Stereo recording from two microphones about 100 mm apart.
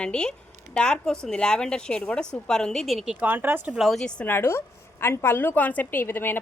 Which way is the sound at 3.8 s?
Centre (ahead or behind).